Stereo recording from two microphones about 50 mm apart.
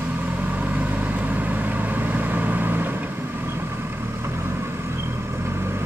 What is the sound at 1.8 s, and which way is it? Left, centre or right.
Vehicle, right.